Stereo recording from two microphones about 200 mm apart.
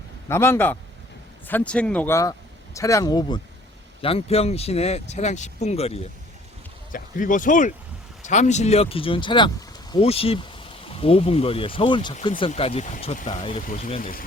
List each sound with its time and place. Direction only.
0.3 s speech: 10° left (ahead or behind); by 6.1 s 30° left (ahead or behind)
6.9 s speech: 40° left (ahead or behind); by 13.6 s 25° left (ahead or behind)
13.7 s speech: 35° left (ahead or behind)